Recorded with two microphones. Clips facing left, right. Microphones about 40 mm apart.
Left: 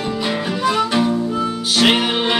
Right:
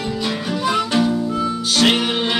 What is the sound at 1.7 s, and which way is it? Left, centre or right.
Music, centre.